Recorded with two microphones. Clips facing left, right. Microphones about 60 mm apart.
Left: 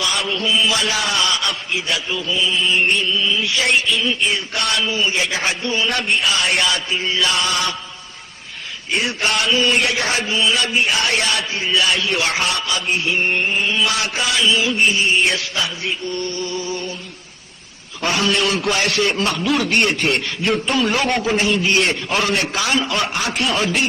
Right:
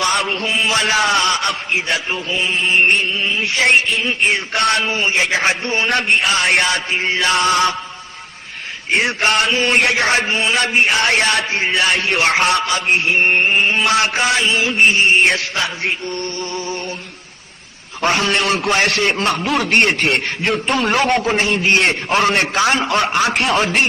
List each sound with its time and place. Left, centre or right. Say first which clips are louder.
0.0 s a man's voice: right 3 dB; right
8.9 s a man's voice: right 4 dB; right
15.9 s music: right 1 dB; right
18.0 s a man's voice: right 2 dB; right
20.0 s a man's voice: right 2 dB; right